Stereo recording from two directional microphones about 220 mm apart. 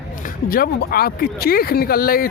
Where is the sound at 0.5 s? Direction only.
45° left (ahead or behind).